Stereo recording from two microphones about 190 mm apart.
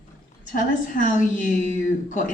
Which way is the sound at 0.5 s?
45° left (ahead or behind).